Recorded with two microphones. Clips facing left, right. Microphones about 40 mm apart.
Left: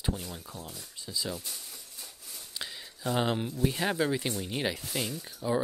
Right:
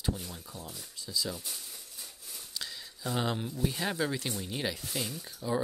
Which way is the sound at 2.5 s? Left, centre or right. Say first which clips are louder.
Left 1 dB; left.